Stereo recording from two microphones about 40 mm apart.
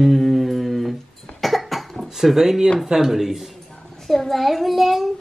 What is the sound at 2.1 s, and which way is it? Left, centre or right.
Speech, centre.